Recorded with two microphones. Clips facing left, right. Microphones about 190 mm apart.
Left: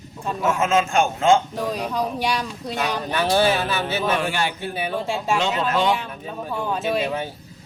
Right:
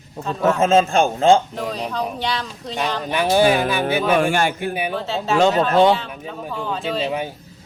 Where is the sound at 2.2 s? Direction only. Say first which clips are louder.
Left 1 dB; 10° left (ahead or behind).